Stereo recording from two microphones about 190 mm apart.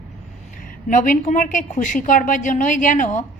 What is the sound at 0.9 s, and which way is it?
A woman's voice, 45° left (ahead or behind).